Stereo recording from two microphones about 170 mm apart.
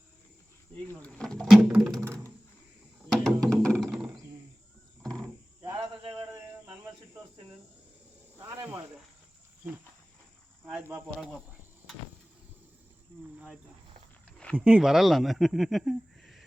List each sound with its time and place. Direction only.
0.9 s speech: 5° left (ahead or behind)
2.0 s computer keyboard: 20° right (ahead or behind)
3.0 s music: centre (ahead or behind)
5.6 s a sound: 25° right (ahead or behind)
10.7 s speech: 10° right (ahead or behind)
14.5 s speech: 10° right (ahead or behind)